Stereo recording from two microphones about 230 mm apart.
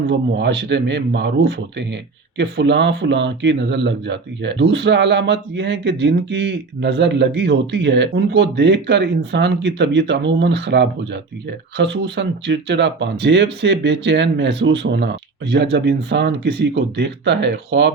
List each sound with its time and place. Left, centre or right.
0.1 s speech: right